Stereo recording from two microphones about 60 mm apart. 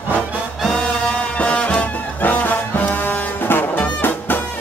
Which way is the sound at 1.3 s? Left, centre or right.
Left.